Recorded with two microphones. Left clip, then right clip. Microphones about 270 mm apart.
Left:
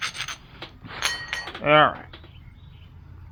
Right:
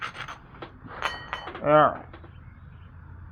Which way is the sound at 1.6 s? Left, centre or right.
Left.